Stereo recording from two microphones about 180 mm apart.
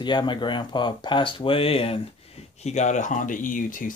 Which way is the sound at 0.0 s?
25° left (ahead or behind).